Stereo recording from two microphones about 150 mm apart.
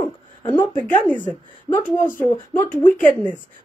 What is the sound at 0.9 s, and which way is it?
Speech, 10° left (ahead or behind).